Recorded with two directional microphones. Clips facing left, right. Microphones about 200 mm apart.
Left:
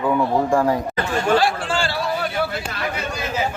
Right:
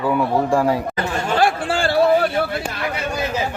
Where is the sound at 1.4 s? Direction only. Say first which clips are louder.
Right 3 dB; 55° right (ahead or behind).